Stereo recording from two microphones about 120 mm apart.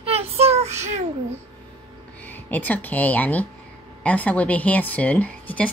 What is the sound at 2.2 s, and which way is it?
Speech, 15° left (ahead or behind).